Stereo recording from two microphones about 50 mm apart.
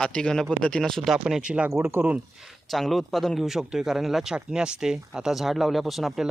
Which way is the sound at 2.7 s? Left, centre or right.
Centre.